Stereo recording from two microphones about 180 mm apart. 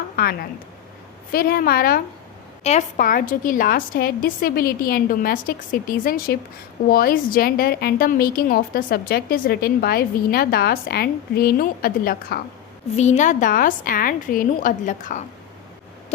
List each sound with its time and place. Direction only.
0.2 s a sound: 60° left (ahead or behind)
1.3 s a woman's voice: 55° left (ahead or behind)
2.6 s a woman's voice: 45° left (ahead or behind)
13.0 s a woman's voice: 40° left (ahead or behind)